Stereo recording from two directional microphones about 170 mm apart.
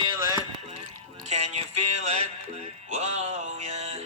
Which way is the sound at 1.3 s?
40° right (ahead or behind).